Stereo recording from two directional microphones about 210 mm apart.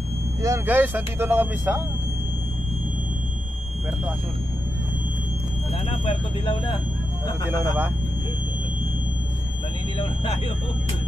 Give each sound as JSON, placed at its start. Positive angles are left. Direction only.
{"t": 0.4, "sound": "speech", "side_deg": -10}
{"t": 5.9, "sound": "speech", "side_deg": 25}
{"t": 7.4, "sound": "speech", "side_deg": -10}